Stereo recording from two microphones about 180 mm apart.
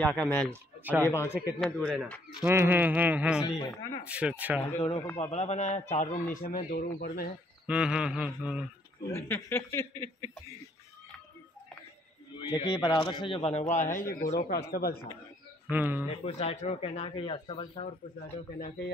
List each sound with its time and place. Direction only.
0.0 s mantra: 5° left (ahead or behind)
0.5 s speech: 10° right (ahead or behind)
1.0 s speech: 15° left (ahead or behind)
2.4 s a sound: 15° right (ahead or behind)
3.4 s speech: 25° left (ahead or behind)
4.1 s a sound: 5° right (ahead or behind)
4.7 s speech: 35° left (ahead or behind)
6.3 s speech: 55° left (ahead or behind)
7.6 s mantra: 5° right (ahead or behind)
9.1 s speech: 15° left (ahead or behind)
12.4 s speech: 25° left (ahead or behind); by 14.1 s 50° left (ahead or behind)
14.3 s speech: 65° left (ahead or behind)
15.7 s a sound: 10° right (ahead or behind)
16.1 s speech: 35° left (ahead or behind)